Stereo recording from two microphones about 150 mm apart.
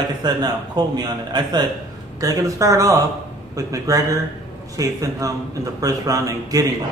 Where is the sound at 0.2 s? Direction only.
25° right (ahead or behind).